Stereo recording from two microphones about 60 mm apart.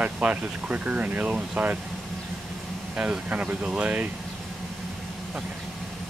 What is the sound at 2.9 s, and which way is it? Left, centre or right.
Speech, right.